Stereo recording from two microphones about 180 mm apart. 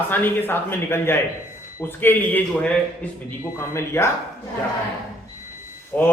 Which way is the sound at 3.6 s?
15° left (ahead or behind).